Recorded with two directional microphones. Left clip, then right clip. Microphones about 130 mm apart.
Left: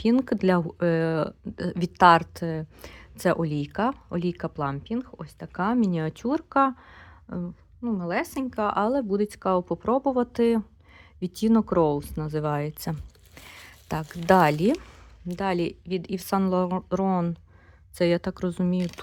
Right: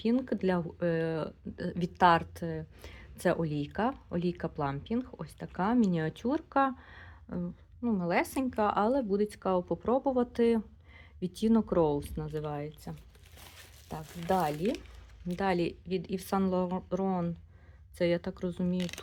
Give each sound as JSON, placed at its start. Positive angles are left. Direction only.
{"t": 0.0, "sound": "speech", "side_deg": 40}
{"t": 15.3, "sound": "speech", "side_deg": 20}